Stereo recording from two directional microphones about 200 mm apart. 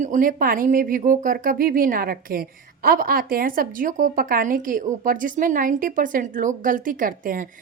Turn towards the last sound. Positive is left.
turn(degrees=-45)  # may be behind; listen again after turning